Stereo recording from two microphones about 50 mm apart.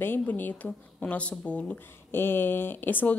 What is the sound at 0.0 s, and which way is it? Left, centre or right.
Speech, left.